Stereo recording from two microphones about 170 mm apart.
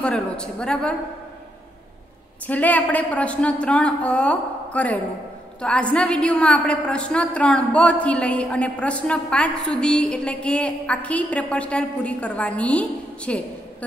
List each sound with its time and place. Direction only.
0.0 s a man's voice: 5° left (ahead or behind)
2.4 s a woman's voice: 10° left (ahead or behind)